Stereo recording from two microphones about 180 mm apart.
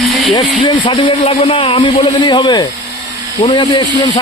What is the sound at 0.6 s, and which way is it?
Speech, 25° left (ahead or behind).